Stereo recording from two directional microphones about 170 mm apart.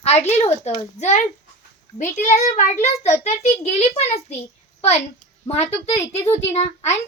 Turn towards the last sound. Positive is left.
turn(degrees=40)  # may be behind; listen again after turning